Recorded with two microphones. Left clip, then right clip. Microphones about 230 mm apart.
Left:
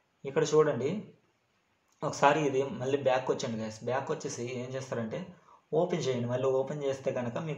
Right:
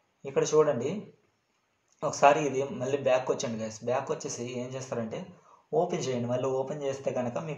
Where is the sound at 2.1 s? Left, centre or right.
Left.